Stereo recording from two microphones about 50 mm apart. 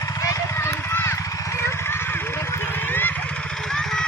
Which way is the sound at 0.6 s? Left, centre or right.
Left.